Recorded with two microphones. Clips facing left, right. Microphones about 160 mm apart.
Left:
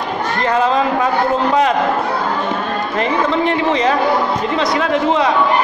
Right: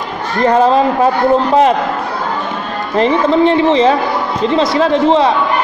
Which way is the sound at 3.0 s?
30° right (ahead or behind).